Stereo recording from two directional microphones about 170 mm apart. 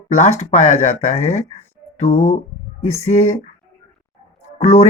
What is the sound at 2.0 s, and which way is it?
Speech, 40° left (ahead or behind).